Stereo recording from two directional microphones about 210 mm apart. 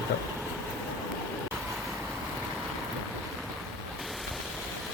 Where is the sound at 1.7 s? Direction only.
Centre (ahead or behind).